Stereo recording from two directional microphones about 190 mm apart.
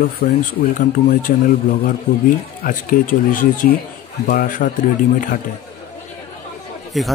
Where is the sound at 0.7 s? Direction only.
45° left (ahead or behind).